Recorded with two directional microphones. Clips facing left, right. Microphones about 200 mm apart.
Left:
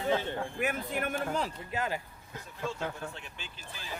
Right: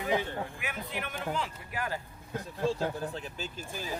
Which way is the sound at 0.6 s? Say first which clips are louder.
Left 6 dB; 45° left (ahead or behind).